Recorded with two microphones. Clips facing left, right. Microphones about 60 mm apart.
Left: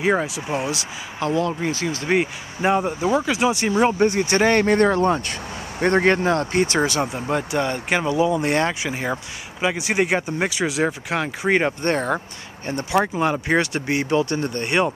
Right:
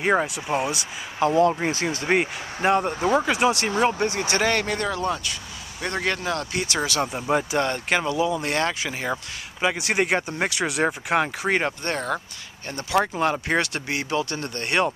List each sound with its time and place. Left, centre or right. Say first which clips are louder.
0.0 s speech: left 1 dB; centre
1.7 s speech: left 1 dB; right
2.0 s speech: left 2 dB; centre
3.7 s speech: left 4 dB; centre
7.1 s speech: even; centre
7.6 s speech: left 1 dB; centre
8.1 s speech: left 4 dB; centre
8.8 s speech: left 2 dB; centre
11.8 s speech: left 5 dB; left
12.9 s speech: left 1 dB; centre
14.7 s speech: left 1 dB; centre